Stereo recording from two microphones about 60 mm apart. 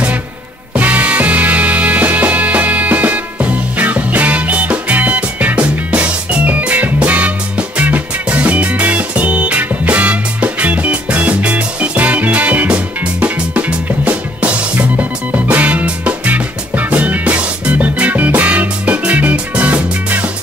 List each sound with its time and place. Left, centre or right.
0.7 s music: right